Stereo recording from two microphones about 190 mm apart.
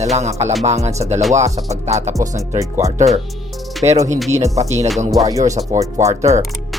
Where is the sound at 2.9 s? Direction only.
35° right (ahead or behind).